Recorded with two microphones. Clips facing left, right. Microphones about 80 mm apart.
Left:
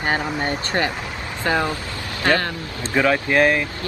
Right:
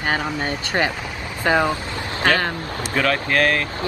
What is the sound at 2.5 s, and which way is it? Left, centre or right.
Speech, right.